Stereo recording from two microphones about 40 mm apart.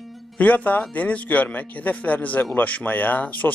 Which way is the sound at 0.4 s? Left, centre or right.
Left.